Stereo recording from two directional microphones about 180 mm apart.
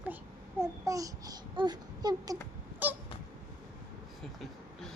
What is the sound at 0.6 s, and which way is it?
A child's voice, 20° right (ahead or behind).